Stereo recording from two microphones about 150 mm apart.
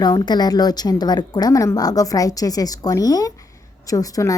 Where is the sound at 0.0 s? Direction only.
25° left (ahead or behind).